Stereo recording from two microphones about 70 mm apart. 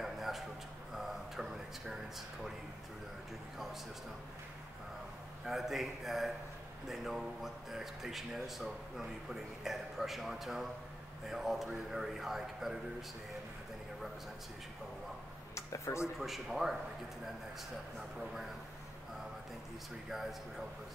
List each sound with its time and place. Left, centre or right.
0.0 s a sound: centre
5.4 s speech: centre
15.5 s speech: left
16.2 s speech: centre
20.1 s speech: centre